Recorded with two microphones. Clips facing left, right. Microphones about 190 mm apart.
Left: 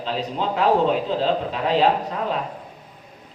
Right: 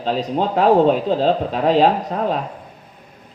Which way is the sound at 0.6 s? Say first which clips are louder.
Right 5 dB; 45° right (ahead or behind).